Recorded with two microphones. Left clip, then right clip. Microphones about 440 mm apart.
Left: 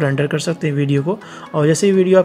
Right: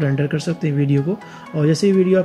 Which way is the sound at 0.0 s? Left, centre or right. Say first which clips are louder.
Left 4 dB; centre.